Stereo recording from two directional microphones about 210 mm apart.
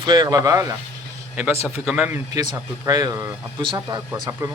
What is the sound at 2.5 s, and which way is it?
A man's voice, 15° right (ahead or behind).